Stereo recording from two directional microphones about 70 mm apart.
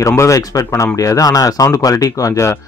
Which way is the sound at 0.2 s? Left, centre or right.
Left.